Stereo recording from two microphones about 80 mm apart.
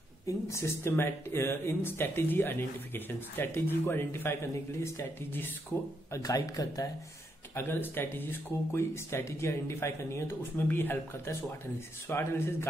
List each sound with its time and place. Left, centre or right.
0.5 s speech: left
6.1 s speech: left
7.5 s a man's voice: left